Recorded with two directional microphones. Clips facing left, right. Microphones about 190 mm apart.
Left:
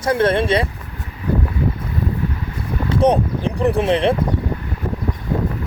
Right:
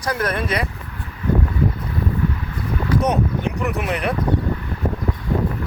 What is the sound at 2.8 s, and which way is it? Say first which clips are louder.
Speech: left 4 dB; 30° left (ahead or behind).